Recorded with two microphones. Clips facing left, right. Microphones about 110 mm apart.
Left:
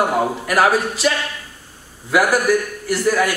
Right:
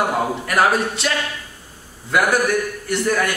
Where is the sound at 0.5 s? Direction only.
Centre (ahead or behind).